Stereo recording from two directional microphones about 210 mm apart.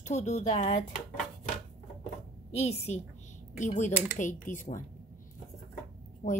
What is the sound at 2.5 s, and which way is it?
Speech, 30° left (ahead or behind).